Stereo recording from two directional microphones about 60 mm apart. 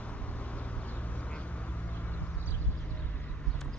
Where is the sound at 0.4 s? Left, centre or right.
Left.